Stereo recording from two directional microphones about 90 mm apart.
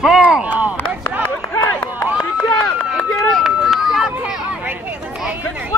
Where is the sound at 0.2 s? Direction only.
15° right (ahead or behind).